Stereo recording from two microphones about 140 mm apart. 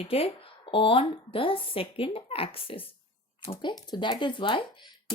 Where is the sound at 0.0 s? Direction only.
45° left (ahead or behind).